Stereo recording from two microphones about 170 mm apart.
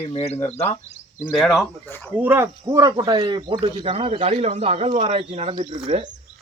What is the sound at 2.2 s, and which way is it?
Speech, 10° right (ahead or behind).